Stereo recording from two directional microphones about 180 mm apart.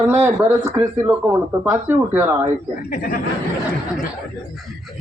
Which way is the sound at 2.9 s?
50° left (ahead or behind).